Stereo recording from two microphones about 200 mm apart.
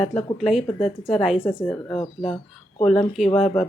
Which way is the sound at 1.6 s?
30° left (ahead or behind).